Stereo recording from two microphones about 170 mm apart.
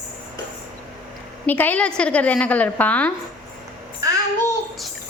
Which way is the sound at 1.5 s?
10° left (ahead or behind).